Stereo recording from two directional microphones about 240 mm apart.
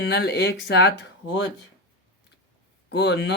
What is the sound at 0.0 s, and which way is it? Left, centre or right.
Speech, left.